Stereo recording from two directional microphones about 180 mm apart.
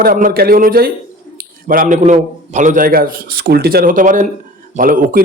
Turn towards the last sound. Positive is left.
turn(degrees=-50)  # may be behind; listen again after turning